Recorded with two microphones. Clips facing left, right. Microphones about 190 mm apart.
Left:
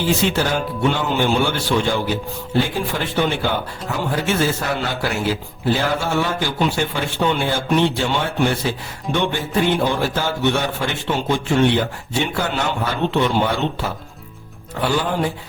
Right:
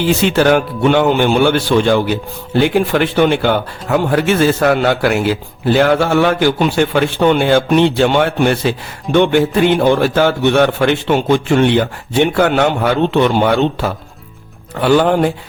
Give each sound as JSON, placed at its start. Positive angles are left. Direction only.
{"t": 0.0, "sound": "a man's voice", "side_deg": -70}